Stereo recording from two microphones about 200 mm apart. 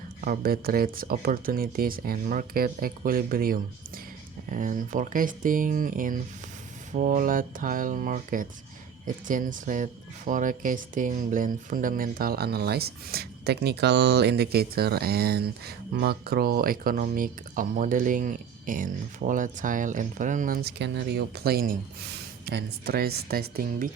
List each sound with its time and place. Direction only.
0.2 s speech: 50° right (ahead or behind)